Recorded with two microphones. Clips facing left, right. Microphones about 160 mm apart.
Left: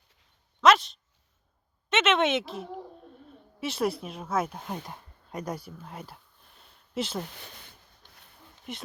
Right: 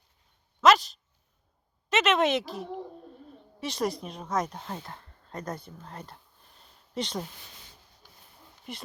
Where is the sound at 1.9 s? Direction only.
Centre (ahead or behind).